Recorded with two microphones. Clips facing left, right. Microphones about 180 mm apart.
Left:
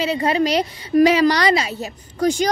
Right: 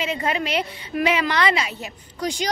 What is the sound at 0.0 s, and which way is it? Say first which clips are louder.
A woman's voice: left 6 dB; 35° left (ahead or behind).